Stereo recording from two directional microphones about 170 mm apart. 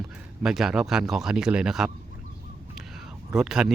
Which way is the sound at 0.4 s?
Centre (ahead or behind).